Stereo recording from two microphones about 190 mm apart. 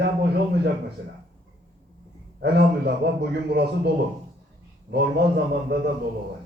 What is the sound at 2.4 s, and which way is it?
A man's voice, 55° right (ahead or behind).